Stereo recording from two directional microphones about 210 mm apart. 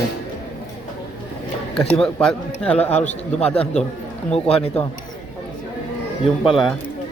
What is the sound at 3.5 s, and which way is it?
Speech, 5° left (ahead or behind).